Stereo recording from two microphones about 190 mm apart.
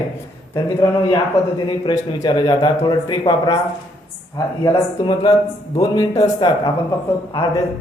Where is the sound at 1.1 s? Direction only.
25° left (ahead or behind).